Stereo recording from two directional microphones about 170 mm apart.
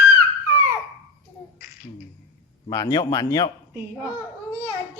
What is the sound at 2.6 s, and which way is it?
Speech, 20° left (ahead or behind).